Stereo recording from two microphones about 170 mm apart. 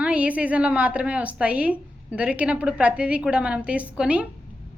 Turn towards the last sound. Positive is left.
turn(degrees=-5)  # may be behind; listen again after turning